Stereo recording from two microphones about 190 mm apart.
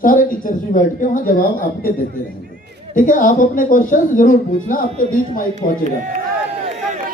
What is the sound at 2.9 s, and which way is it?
Speech, 45° left (ahead or behind).